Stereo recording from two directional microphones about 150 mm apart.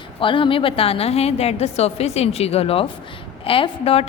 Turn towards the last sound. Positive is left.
turn(degrees=40)  # may be behind; listen again after turning